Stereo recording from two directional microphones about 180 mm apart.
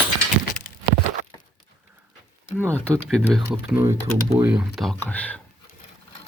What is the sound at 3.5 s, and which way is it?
Speech, 15° right (ahead or behind).